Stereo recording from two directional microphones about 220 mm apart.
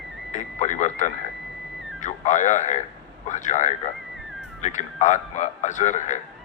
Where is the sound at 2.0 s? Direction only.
35° left (ahead or behind).